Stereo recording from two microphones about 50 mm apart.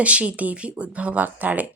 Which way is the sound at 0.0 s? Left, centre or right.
Right.